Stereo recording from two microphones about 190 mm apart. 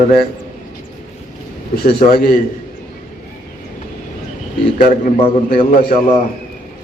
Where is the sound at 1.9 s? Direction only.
55° left (ahead or behind).